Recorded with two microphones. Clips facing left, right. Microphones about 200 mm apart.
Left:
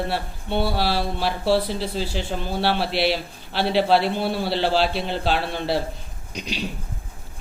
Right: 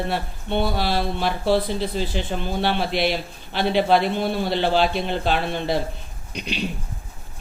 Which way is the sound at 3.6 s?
5° left (ahead or behind).